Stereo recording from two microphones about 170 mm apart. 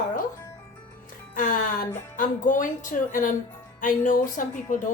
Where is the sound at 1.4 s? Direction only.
50° left (ahead or behind).